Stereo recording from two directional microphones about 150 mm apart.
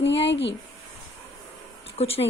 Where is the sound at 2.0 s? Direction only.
40° left (ahead or behind).